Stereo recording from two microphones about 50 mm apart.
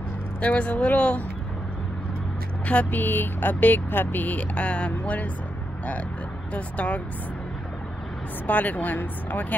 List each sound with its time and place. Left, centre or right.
0.4 s speech: left
2.6 s speech: left
3.0 s speech: left
6.5 s speech: left
8.5 s speech: left